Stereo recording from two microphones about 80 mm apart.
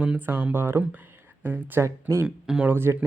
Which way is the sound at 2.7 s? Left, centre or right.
Right.